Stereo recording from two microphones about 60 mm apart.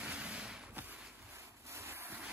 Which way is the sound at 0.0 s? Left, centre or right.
Right.